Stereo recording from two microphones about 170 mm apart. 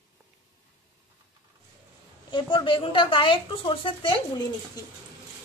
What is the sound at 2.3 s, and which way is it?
A woman's voice, 30° left (ahead or behind).